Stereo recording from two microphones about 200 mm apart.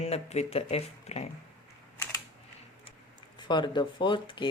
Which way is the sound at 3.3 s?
25° left (ahead or behind).